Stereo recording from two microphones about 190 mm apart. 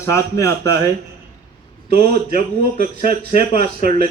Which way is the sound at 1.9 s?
55° right (ahead or behind).